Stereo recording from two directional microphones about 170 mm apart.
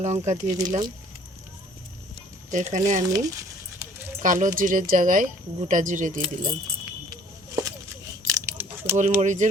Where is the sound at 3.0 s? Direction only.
20° right (ahead or behind).